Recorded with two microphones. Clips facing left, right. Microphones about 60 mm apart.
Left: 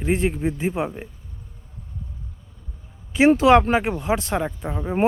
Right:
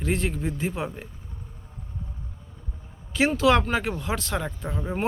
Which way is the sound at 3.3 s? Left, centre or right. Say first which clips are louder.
Left 7 dB; left.